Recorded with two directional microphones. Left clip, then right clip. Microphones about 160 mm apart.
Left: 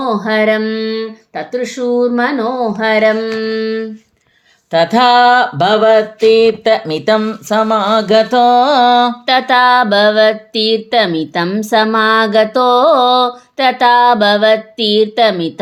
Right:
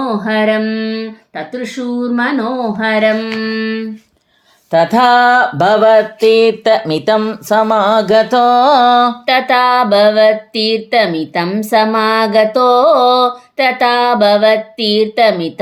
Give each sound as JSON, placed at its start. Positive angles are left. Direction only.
{"t": 0.0, "sound": "speech", "side_deg": 45}
{"t": 4.7, "sound": "mantra", "side_deg": -25}
{"t": 9.2, "sound": "music", "side_deg": 35}